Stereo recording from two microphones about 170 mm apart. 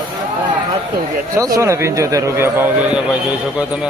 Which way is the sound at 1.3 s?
20° right (ahead or behind).